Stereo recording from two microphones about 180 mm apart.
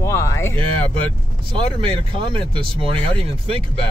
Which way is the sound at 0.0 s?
15° left (ahead or behind).